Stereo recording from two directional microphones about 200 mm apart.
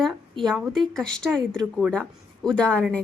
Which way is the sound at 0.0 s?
Centre (ahead or behind).